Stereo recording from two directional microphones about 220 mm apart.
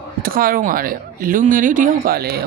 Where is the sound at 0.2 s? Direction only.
40° right (ahead or behind).